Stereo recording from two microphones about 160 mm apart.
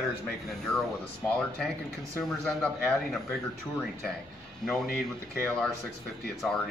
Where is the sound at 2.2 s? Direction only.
5° left (ahead or behind).